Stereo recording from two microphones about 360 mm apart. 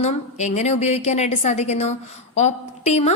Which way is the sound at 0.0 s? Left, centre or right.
Centre.